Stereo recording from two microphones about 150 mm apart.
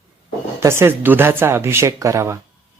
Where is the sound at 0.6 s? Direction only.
15° right (ahead or behind).